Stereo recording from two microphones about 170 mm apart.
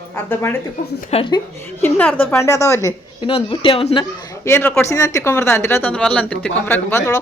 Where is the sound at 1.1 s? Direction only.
30° left (ahead or behind).